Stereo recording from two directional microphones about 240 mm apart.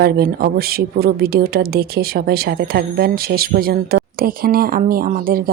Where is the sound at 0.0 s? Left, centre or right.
Right.